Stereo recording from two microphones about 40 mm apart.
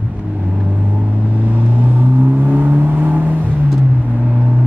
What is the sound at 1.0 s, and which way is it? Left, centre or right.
Vehicle, right.